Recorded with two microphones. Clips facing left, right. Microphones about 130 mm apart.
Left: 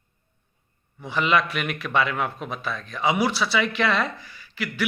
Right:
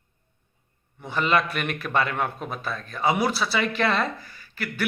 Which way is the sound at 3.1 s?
Centre (ahead or behind).